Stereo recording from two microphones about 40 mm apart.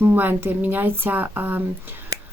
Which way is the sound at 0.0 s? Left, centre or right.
Right.